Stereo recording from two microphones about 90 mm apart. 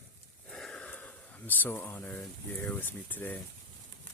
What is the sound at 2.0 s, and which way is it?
Speech, 15° left (ahead or behind).